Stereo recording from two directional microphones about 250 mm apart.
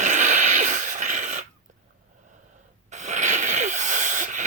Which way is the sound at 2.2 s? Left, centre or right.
Right.